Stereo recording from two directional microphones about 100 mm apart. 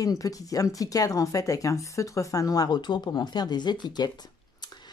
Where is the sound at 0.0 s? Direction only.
35° left (ahead or behind).